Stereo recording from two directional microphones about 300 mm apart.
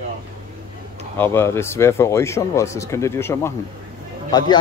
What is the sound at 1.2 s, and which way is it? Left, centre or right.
Speech, centre.